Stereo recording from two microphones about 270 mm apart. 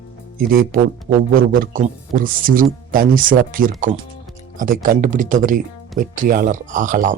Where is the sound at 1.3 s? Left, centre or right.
Right.